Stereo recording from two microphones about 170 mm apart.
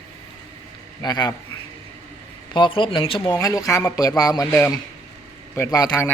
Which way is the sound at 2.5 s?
30° left (ahead or behind).